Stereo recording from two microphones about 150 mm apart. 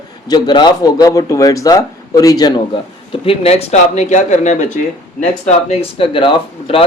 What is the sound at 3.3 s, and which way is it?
Speech, 45° left (ahead or behind).